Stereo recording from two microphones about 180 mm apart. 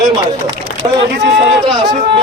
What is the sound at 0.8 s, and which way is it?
Speech, 30° right (ahead or behind).